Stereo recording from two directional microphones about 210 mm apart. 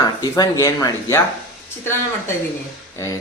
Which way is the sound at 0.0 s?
15° left (ahead or behind).